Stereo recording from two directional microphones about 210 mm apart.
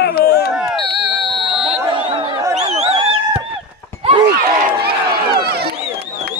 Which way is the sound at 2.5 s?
30° right (ahead or behind).